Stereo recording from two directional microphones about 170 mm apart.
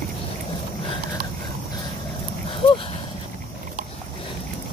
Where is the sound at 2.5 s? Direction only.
30° left (ahead or behind).